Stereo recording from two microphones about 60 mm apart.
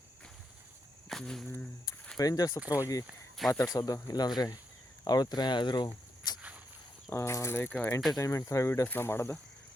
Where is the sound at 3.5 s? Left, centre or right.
Left.